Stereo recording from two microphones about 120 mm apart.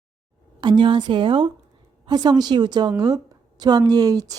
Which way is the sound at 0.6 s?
40° right (ahead or behind).